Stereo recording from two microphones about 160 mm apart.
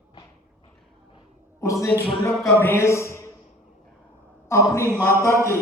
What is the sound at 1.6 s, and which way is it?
A man's voice, 20° left (ahead or behind).